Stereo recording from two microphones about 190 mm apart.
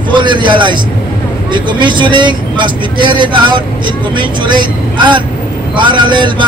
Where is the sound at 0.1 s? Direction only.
25° right (ahead or behind).